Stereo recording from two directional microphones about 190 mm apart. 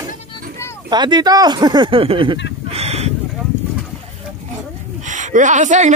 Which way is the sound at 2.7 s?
35° right (ahead or behind).